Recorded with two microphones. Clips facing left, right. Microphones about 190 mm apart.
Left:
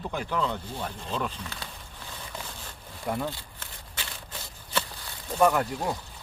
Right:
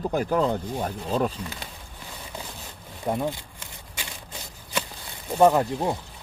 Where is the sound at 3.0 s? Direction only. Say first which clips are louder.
Right 4 dB; 20° right (ahead or behind).